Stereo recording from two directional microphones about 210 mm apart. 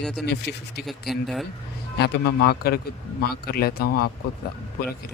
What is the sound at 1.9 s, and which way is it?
Speech, 50° left (ahead or behind).